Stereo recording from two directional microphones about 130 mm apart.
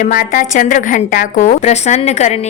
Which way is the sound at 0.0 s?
90° left.